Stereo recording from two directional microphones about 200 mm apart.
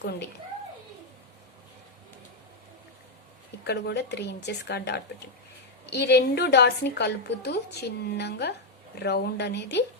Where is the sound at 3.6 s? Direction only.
55° left (ahead or behind).